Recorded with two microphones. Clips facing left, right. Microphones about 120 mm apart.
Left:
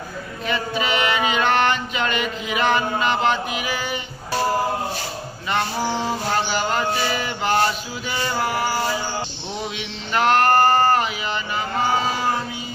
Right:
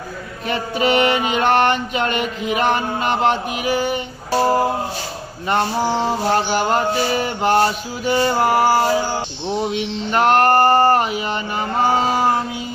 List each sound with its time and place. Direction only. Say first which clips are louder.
0.4 s music: right 4 dB; 45° right (ahead or behind)
5.5 s mantra: right 5 dB; 40° right (ahead or behind)
8.0 s music: right 8 dB; 40° right (ahead or behind)
10.7 s a sound: right 3 dB; 30° right (ahead or behind)
10.9 s music: right 3 dB; 45° right (ahead or behind)
11.8 s a sound: right 5 dB; 45° right (ahead or behind)